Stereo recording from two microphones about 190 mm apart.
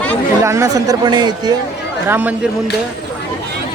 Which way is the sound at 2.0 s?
10° right (ahead or behind).